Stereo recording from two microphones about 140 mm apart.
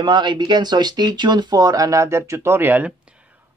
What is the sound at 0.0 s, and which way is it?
Speech, 35° right (ahead or behind).